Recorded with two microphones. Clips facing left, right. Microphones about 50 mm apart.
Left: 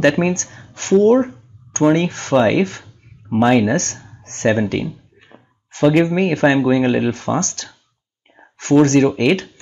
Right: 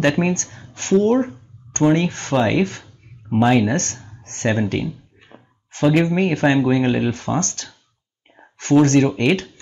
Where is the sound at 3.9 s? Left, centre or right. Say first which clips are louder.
Left 1 dB; left.